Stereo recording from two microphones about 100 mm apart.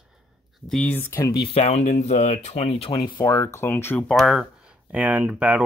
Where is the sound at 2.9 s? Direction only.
50° left (ahead or behind).